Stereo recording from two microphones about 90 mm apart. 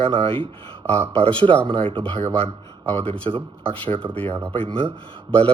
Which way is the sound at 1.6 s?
75° right (ahead or behind).